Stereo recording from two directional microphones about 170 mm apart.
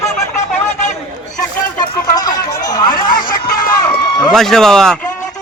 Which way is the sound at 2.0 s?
20° left (ahead or behind).